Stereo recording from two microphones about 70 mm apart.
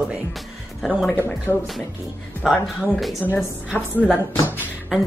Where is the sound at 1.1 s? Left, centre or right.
Left.